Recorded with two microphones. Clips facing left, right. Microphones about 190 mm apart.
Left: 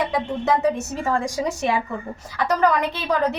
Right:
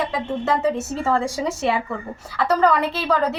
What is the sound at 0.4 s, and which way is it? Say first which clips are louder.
A woman's voice: even; 15° left (ahead or behind).